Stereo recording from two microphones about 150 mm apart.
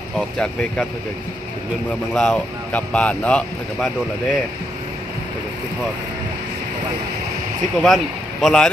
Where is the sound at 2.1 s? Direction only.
5° left (ahead or behind).